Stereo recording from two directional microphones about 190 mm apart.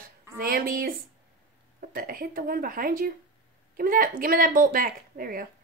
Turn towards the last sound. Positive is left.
turn(degrees=-50)  # may be behind; listen again after turning